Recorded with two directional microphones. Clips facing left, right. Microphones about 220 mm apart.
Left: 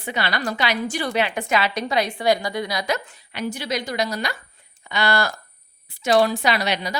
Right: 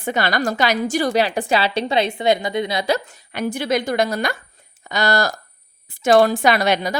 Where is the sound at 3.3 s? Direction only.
50° right (ahead or behind).